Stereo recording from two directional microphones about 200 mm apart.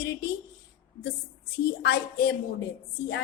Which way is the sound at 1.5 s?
55° left (ahead or behind).